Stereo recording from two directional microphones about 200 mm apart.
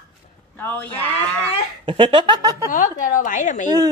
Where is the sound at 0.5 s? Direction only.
10° left (ahead or behind).